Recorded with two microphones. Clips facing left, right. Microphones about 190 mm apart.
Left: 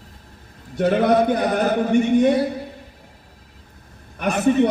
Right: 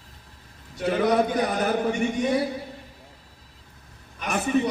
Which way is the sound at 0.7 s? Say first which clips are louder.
Left 5 dB; 60° left (ahead or behind).